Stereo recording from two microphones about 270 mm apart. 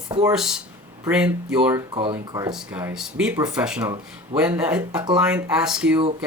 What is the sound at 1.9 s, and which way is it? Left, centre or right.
Speech, centre.